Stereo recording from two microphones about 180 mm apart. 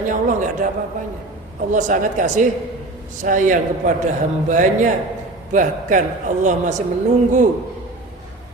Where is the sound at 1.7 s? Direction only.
45° right (ahead or behind).